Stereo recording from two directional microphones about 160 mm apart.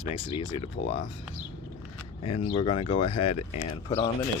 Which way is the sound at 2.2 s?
35° left (ahead or behind).